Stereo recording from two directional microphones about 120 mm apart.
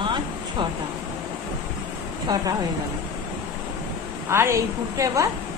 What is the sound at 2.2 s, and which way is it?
Speech, 30° right (ahead or behind).